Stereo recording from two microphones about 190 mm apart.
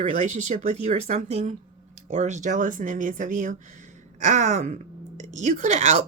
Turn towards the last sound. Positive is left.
turn(degrees=-35)  # may be behind; listen again after turning